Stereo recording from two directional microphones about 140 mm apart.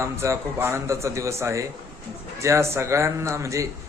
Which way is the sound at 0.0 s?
20° right (ahead or behind).